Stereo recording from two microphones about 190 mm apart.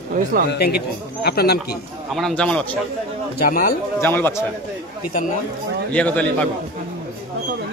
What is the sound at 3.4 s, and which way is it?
Speech, 50° left (ahead or behind).